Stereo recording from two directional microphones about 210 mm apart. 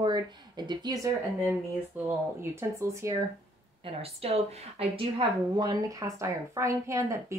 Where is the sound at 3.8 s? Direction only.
30° right (ahead or behind).